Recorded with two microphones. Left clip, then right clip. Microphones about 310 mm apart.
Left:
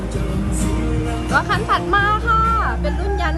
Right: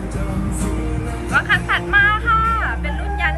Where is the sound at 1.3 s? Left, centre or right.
Centre.